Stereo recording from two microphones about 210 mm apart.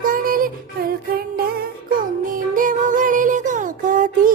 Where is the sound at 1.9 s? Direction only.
40° right (ahead or behind).